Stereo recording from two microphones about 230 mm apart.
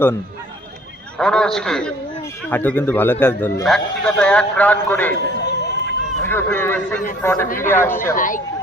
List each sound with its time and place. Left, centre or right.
1.2 s a man's voice: centre
5.5 s run: left
6.2 s a man's voice: centre
8.1 s speech: left